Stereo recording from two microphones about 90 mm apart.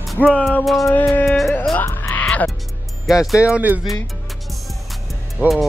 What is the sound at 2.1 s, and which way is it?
Music, 15° left (ahead or behind).